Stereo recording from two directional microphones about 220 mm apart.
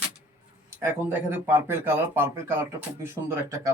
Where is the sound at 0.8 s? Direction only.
10° right (ahead or behind).